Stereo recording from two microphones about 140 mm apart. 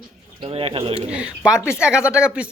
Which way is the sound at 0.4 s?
45° right (ahead or behind).